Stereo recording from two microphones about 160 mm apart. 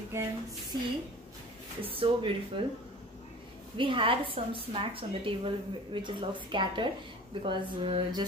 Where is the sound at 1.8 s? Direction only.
35° right (ahead or behind).